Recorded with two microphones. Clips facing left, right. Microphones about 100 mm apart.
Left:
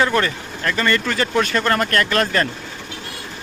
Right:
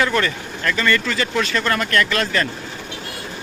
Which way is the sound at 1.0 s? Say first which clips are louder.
Left 2 dB; 45° left (ahead or behind).